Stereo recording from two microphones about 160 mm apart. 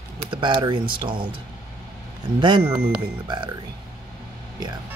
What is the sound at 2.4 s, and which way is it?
Speech, 30° right (ahead or behind).